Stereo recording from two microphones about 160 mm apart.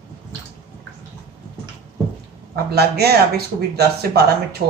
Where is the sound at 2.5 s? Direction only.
85° right.